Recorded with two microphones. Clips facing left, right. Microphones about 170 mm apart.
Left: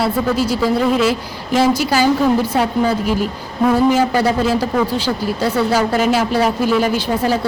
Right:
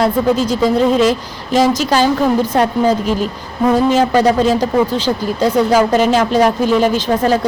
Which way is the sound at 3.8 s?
10° left (ahead or behind).